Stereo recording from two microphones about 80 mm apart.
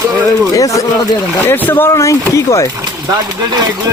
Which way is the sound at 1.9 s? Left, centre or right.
Left.